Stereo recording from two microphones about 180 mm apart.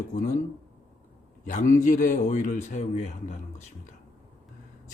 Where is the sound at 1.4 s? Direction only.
45° left (ahead or behind).